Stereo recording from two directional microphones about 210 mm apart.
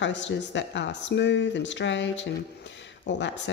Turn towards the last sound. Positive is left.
turn(degrees=55)  # may be behind; listen again after turning